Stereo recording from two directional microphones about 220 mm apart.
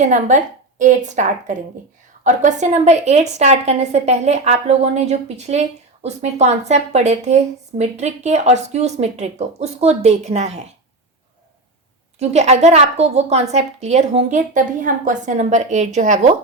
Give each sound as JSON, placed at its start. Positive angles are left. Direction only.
{"t": 0.0, "sound": "a woman's voice", "side_deg": -35}
{"t": 12.2, "sound": "a woman's voice", "side_deg": -30}